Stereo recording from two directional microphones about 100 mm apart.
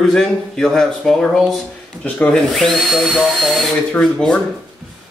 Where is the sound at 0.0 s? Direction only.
5° left (ahead or behind).